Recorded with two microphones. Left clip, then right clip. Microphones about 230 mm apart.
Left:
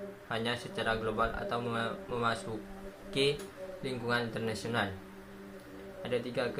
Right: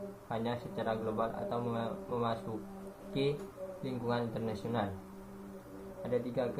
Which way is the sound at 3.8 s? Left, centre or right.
Left.